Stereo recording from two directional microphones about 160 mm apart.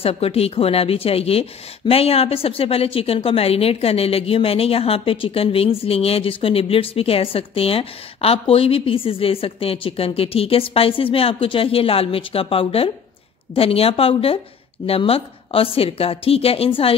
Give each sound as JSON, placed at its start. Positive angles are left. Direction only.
{"t": 0.0, "sound": "a woman's voice", "side_deg": 35}